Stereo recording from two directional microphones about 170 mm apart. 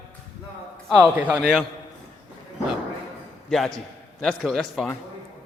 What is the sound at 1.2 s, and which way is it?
Speech, 10° right (ahead or behind).